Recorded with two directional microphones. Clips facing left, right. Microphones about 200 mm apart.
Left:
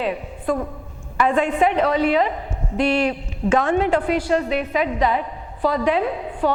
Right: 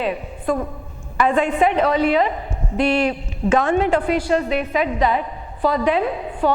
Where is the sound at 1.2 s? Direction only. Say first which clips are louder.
Right 1 dB; 15° right (ahead or behind).